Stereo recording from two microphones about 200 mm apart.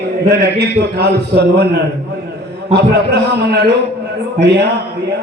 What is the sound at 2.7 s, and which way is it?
A man's voice, 55° right (ahead or behind).